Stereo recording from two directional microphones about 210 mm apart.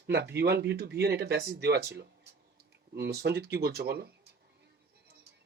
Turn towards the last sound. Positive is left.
turn(degrees=-50)  # may be behind; listen again after turning